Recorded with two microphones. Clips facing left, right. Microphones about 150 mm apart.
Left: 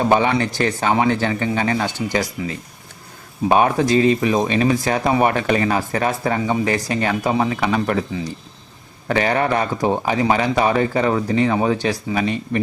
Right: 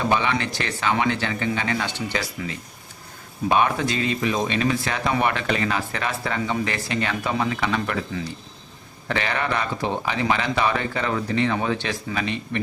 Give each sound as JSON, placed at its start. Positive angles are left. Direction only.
{"t": 0.0, "sound": "speech", "side_deg": 40}
{"t": 3.5, "sound": "speech", "side_deg": 40}
{"t": 9.0, "sound": "speech", "side_deg": 40}